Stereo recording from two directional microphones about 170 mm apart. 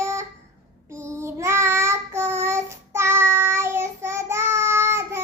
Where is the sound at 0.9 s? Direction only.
15° right (ahead or behind).